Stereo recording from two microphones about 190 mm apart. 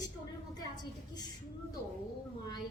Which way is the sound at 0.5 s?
20° left (ahead or behind).